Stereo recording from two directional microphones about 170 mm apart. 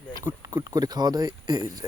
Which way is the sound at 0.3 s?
20° right (ahead or behind).